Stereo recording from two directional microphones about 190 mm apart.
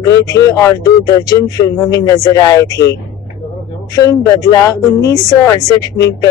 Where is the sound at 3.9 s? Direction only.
20° left (ahead or behind).